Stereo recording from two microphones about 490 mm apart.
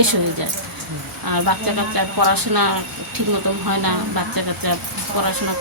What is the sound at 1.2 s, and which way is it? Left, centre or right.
Speech, right.